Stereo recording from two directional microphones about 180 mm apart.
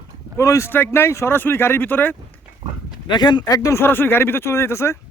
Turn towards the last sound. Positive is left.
turn(degrees=15)  # may be behind; listen again after turning